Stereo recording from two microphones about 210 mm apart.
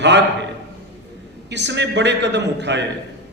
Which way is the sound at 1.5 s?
55° right (ahead or behind).